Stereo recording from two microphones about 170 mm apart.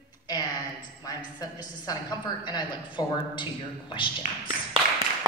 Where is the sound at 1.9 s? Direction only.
20° left (ahead or behind).